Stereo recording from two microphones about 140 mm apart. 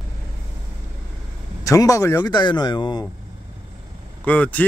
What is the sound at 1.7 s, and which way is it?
Speech, 25° left (ahead or behind).